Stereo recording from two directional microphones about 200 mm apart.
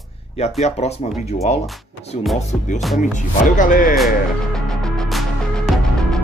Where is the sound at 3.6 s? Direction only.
40° left (ahead or behind).